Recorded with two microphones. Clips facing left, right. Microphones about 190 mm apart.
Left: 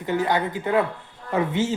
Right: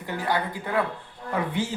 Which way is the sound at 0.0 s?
20° left (ahead or behind).